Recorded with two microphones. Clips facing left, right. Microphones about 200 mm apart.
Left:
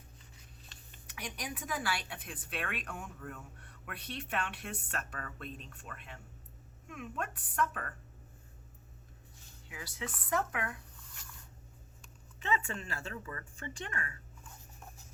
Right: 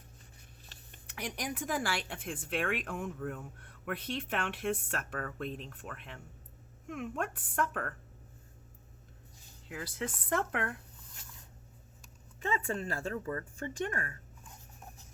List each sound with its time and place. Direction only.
1.1 s speech: 65° right (ahead or behind)
2.0 s speech: 50° right (ahead or behind)
9.6 s speech: 50° right (ahead or behind)
12.4 s speech: 40° right (ahead or behind)